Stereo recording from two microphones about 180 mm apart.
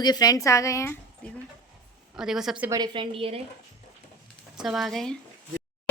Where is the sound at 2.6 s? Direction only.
20° right (ahead or behind).